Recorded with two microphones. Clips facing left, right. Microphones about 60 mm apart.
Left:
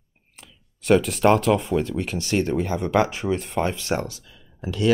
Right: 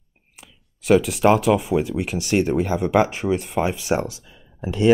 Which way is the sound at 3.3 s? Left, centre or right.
Centre.